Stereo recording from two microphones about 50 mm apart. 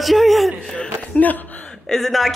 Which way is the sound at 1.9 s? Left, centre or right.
Centre.